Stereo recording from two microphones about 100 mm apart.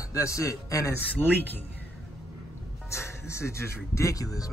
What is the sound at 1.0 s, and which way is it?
Speech, 20° left (ahead or behind).